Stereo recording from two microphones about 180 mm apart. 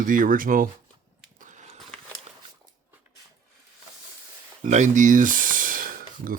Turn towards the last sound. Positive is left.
turn(degrees=-50)  # may be behind; listen again after turning